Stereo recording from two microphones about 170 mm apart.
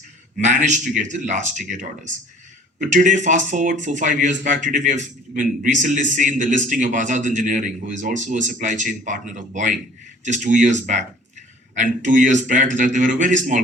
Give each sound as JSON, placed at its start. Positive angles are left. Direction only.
{"t": 0.3, "sound": "a man's voice", "side_deg": -45}